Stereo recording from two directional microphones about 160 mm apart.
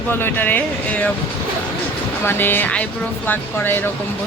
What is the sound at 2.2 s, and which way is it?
Speech, 10° left (ahead or behind).